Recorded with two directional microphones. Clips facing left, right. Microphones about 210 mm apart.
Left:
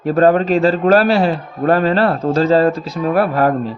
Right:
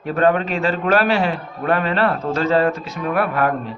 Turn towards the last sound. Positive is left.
turn(degrees=35)  # may be behind; listen again after turning